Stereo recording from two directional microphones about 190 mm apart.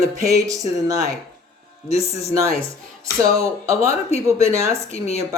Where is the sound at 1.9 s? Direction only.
35° left (ahead or behind).